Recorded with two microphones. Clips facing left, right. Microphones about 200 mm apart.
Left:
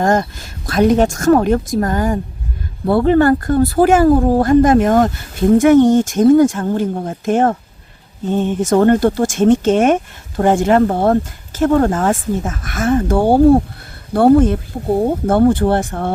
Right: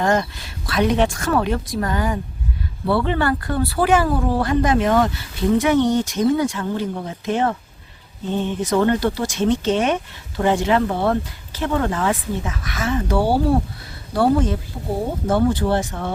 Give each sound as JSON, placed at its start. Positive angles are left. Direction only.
{"t": 0.0, "sound": "speech", "side_deg": 45}